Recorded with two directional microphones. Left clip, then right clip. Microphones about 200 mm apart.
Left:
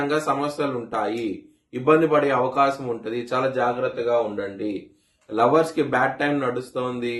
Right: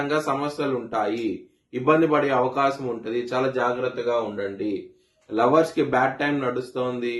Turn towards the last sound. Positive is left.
turn(degrees=15)  # may be behind; listen again after turning